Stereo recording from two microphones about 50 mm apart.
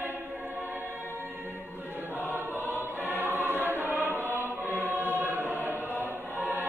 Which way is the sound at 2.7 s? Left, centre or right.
Right.